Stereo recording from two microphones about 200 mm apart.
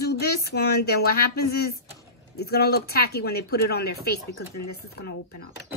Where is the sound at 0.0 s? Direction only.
55° left (ahead or behind).